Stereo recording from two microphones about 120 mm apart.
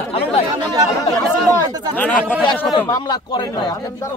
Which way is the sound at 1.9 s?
15° left (ahead or behind).